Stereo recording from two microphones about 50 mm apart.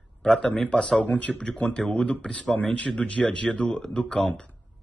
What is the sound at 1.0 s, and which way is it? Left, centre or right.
Speech, left.